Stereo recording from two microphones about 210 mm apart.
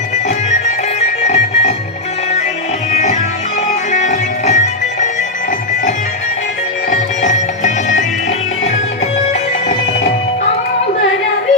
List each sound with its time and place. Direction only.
0.9 s music: 30° left (ahead or behind)
2.9 s music: 35° left (ahead or behind)
6.9 s music: 35° left (ahead or behind)